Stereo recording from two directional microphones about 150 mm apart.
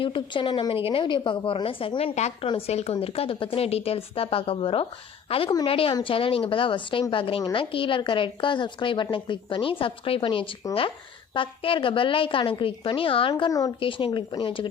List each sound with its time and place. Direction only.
0.0 s a woman's voice: 35° left (ahead or behind)
13.7 s a woman's voice: 35° left (ahead or behind)